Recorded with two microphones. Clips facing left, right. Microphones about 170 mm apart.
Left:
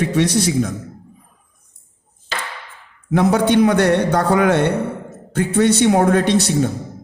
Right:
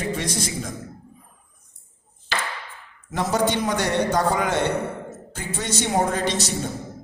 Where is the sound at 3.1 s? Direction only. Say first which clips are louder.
Left 8 dB; 60° left (ahead or behind).